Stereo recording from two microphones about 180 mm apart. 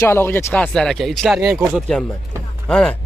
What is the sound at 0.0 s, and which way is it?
Speech, 15° left (ahead or behind).